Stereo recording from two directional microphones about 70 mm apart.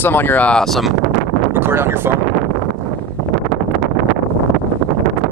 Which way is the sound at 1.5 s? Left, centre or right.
Right.